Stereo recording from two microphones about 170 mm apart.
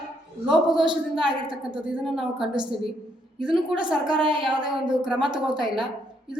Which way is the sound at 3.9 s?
5° right (ahead or behind).